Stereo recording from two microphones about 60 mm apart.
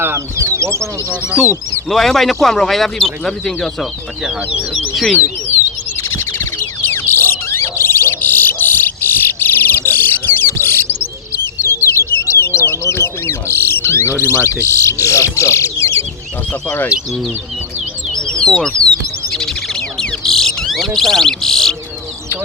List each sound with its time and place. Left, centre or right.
0.0 s speech: right
1.1 s speech: right
1.9 s speech: centre
4.2 s speech: centre
6.0 s bird: left
17.1 s speech: centre
18.1 s bird: centre